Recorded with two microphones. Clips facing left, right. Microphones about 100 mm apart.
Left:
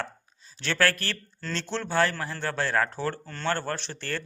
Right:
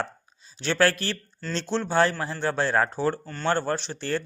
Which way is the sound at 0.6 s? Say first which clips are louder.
Right 3 dB; 20° right (ahead or behind).